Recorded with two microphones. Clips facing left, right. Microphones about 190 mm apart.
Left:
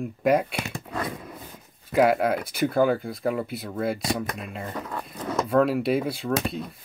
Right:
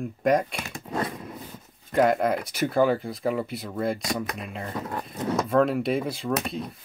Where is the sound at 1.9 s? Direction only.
5° left (ahead or behind).